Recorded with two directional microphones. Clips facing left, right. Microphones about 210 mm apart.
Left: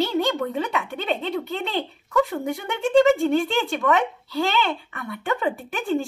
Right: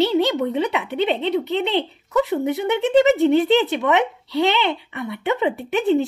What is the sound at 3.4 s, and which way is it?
Speech, 20° right (ahead or behind).